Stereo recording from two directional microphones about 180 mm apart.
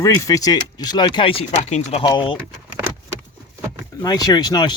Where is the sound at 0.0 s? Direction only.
20° left (ahead or behind).